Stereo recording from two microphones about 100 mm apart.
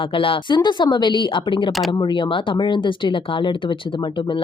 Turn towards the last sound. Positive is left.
turn(degrees=55)  # may be behind; listen again after turning